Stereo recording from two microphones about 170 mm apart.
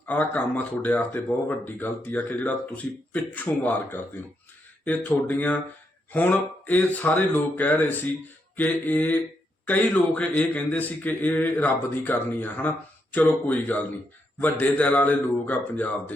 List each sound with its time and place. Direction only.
0.0 s a man's voice: 10° left (ahead or behind)